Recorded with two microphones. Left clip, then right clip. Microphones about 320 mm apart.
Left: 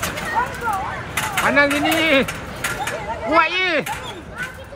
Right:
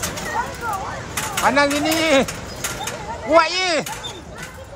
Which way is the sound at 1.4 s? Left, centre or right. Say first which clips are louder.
Even; centre.